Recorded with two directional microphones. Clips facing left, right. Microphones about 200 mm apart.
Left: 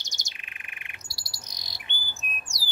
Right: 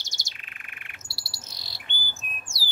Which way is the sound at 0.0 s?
15° left (ahead or behind).